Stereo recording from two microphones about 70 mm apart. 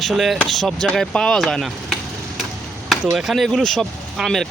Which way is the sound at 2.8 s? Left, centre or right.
Centre.